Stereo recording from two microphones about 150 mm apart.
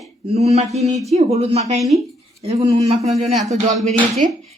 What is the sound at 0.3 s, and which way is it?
A woman's voice, 45° right (ahead or behind).